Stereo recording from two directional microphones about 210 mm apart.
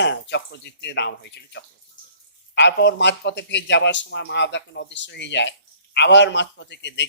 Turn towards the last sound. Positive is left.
turn(degrees=55)  # may be behind; listen again after turning